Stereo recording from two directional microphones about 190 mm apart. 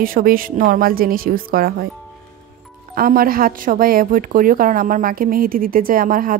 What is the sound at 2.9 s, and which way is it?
Speech, 50° right (ahead or behind).